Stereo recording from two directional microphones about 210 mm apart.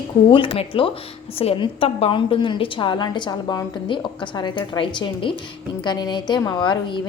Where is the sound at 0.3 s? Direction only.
25° left (ahead or behind).